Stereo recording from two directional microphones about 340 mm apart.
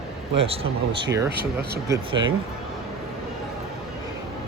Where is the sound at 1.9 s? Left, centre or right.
Centre.